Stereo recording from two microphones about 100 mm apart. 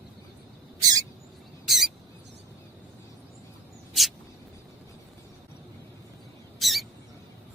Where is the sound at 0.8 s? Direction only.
40° right (ahead or behind).